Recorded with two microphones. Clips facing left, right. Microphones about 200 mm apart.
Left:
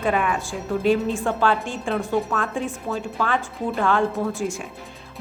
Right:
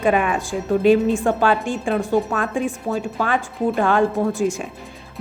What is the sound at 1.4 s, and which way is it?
A woman's voice, 15° right (ahead or behind).